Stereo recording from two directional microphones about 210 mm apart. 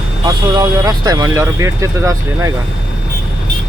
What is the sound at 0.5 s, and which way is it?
Speech, 20° right (ahead or behind).